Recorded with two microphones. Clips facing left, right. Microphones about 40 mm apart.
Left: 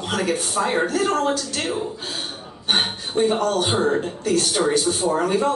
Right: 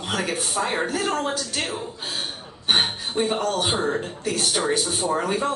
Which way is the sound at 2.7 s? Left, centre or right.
Centre.